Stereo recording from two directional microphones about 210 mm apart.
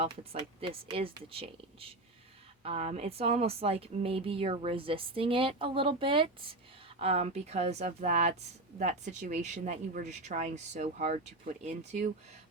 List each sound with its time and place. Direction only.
0.0 s speech: 25° right (ahead or behind)